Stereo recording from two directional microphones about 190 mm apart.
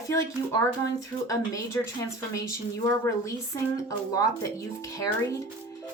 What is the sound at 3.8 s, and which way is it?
A woman's voice, 20° left (ahead or behind).